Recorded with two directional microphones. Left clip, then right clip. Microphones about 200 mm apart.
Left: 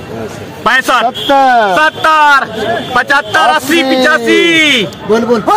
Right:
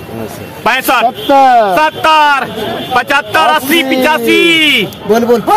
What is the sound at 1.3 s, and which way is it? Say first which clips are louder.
Speech: right 1 dB; 5° left (ahead or behind).